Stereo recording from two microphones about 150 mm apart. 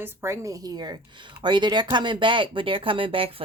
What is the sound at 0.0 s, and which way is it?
Speech, 15° right (ahead or behind).